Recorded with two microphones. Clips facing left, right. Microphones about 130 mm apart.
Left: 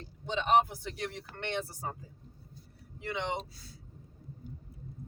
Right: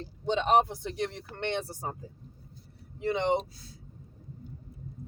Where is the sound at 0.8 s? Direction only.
25° right (ahead or behind).